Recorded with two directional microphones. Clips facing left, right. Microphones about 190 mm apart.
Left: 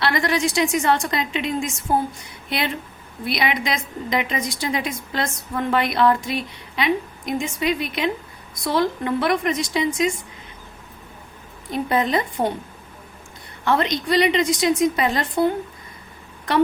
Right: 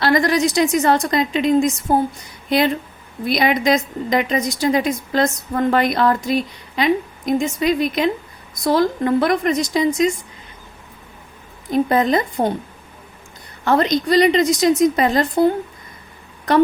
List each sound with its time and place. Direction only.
0.0 s a woman's voice: 40° right (ahead or behind)
11.7 s a woman's voice: 45° right (ahead or behind)
13.7 s a woman's voice: 40° right (ahead or behind)